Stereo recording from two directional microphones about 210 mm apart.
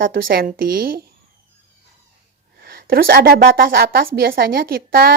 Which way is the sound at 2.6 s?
45° right (ahead or behind).